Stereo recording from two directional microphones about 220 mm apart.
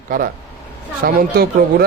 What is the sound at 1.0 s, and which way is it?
Speech, 40° right (ahead or behind).